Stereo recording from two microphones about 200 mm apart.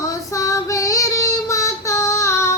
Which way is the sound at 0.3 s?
15° left (ahead or behind).